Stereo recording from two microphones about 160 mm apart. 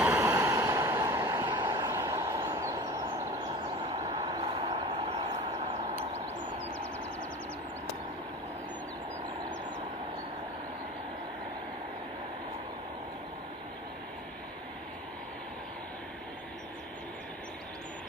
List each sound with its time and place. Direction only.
0.0 s vehicle: 15° right (ahead or behind)
1.9 s vehicle: 20° right (ahead or behind)
2.6 s a sound: 30° right (ahead or behind)
3.2 s vehicle: 40° right (ahead or behind)